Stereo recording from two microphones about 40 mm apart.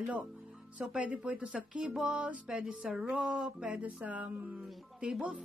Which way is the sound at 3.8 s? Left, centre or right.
Right.